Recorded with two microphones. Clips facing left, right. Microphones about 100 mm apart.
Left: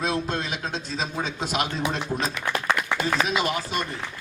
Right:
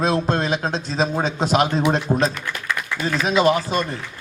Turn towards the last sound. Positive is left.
turn(degrees=-35)  # may be behind; listen again after turning